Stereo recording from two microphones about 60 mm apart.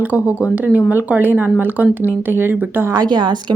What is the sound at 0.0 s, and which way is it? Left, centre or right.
Speech, right.